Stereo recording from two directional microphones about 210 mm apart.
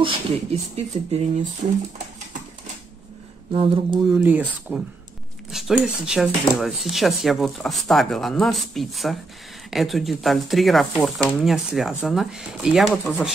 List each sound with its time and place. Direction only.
0.0 s speech: 30° right (ahead or behind)
3.5 s speech: 25° right (ahead or behind)
4.1 s speech: 10° right (ahead or behind)